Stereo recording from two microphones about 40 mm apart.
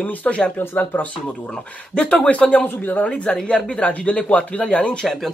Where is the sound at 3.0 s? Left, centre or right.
Left.